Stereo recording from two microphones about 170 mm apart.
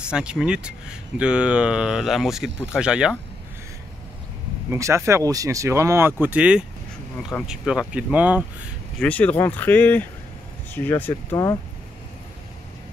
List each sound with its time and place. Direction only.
0.1 s speech: 5° right (ahead or behind)
4.6 s speech: 15° right (ahead or behind)
9.0 s speech: 10° left (ahead or behind)